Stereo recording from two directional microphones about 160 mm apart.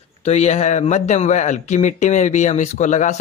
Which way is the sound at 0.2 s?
40° left (ahead or behind).